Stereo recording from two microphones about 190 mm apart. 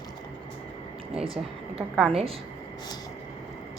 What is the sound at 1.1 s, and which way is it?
Speech, 30° right (ahead or behind).